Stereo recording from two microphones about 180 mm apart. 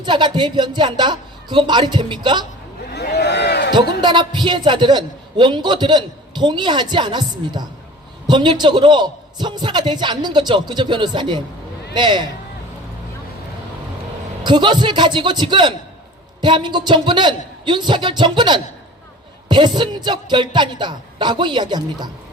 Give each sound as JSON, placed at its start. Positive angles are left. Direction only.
{"t": 0.0, "sound": "a man's voice", "side_deg": -25}
{"t": 2.9, "sound": "a sound", "side_deg": 65}
{"t": 4.0, "sound": "a man's voice", "side_deg": -25}
{"t": 14.4, "sound": "a man's voice", "side_deg": -25}